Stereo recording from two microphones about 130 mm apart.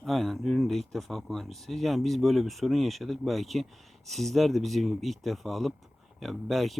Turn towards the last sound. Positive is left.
turn(degrees=0)  # may be behind; listen again after turning